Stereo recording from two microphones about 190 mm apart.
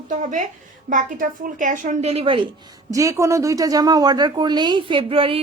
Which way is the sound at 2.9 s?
15° right (ahead or behind).